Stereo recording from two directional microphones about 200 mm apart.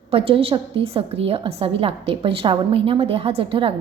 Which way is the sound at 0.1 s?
30° right (ahead or behind).